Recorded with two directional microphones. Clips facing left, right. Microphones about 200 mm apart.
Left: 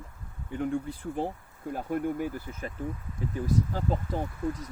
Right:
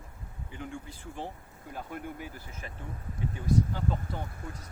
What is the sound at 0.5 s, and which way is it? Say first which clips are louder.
Speech: left 11 dB; 45° left (ahead or behind).